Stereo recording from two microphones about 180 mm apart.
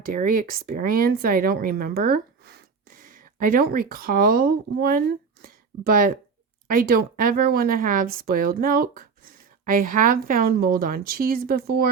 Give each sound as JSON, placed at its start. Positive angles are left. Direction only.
{"t": 0.0, "sound": "a woman's voice", "side_deg": -50}